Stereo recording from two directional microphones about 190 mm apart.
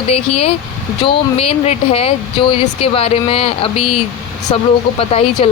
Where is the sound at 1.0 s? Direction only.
30° left (ahead or behind).